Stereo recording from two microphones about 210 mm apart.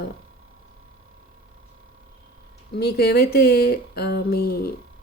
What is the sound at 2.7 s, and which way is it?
Speech, 50° left (ahead or behind).